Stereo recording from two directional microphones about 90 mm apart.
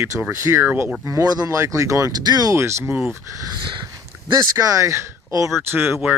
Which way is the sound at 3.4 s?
60° right (ahead or behind).